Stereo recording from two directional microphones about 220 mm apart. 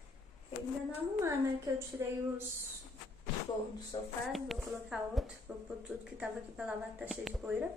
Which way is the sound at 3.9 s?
20° left (ahead or behind).